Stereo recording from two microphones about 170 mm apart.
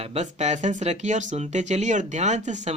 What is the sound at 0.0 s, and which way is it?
Speech, 40° right (ahead or behind).